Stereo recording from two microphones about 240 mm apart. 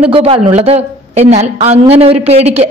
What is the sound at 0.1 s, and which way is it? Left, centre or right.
A woman's voice, right.